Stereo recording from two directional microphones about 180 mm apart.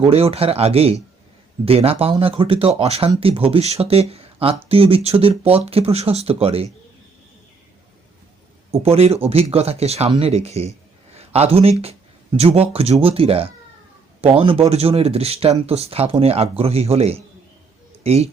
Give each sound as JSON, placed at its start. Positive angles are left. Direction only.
{"t": 0.0, "sound": "speech", "side_deg": -35}
{"t": 8.8, "sound": "a man's voice", "side_deg": -35}